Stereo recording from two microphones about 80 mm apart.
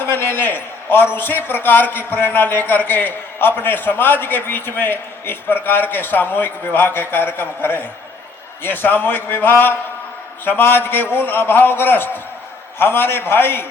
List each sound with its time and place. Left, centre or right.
0.0 s a man's voice: left